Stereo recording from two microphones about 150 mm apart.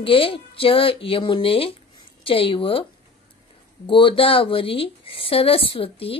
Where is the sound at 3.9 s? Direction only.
35° left (ahead or behind).